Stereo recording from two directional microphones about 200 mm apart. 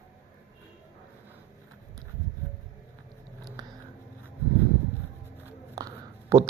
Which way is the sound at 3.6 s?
20° right (ahead or behind).